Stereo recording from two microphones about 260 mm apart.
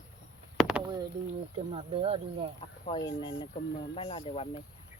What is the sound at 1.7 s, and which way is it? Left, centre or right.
Speech, right.